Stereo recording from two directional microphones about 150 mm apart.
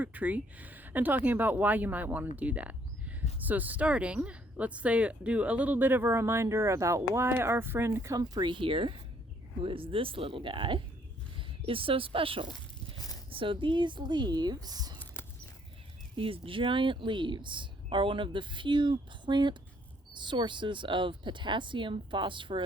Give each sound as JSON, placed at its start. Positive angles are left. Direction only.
{"t": 0.0, "sound": "speech", "side_deg": -10}
{"t": 16.1, "sound": "speech", "side_deg": -40}